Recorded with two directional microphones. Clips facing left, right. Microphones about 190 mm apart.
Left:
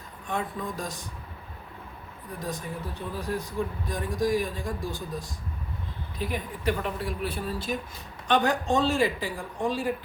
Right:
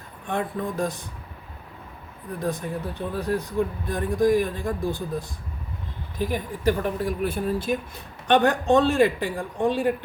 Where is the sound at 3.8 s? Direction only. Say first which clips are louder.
Right 7 dB; 55° right (ahead or behind).